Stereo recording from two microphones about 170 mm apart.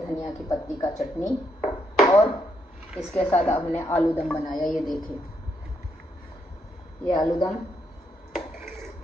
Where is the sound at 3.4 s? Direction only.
15° left (ahead or behind).